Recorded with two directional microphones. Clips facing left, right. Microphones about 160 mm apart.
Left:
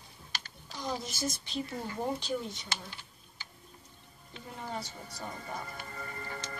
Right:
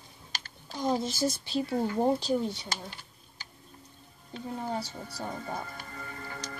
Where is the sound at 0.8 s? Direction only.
30° right (ahead or behind).